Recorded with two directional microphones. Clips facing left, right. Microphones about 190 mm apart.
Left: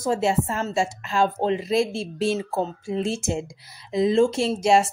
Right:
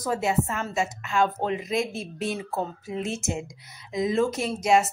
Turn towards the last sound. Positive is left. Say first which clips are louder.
# left 3 dB
turn(degrees=30)  # may be behind; listen again after turning